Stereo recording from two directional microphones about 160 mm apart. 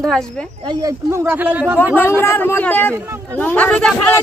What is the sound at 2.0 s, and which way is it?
Speech, 15° left (ahead or behind).